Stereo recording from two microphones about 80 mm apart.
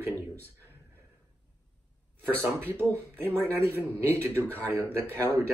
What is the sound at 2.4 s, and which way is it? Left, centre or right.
A man's voice, right.